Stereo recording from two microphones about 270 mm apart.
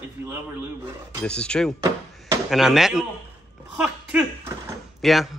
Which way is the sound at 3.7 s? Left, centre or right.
Centre.